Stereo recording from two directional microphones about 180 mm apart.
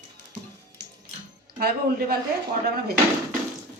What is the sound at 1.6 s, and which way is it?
Speech, 60° right (ahead or behind).